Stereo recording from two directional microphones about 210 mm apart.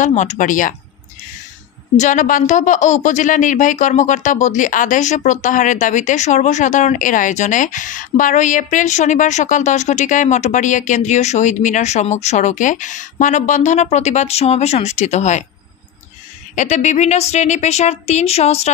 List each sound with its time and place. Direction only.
0.0 s a woman's voice: 35° left (ahead or behind)
2.0 s a woman's voice: 35° left (ahead or behind)
16.5 s a woman's voice: 35° left (ahead or behind)